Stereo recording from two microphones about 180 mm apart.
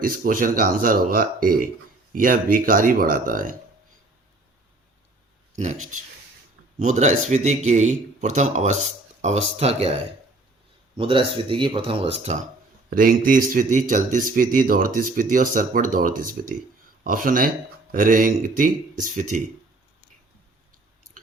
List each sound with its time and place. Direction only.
0.0 s speech: 50° right (ahead or behind)
5.5 s speech: 40° right (ahead or behind)
12.9 s speech: 50° right (ahead or behind)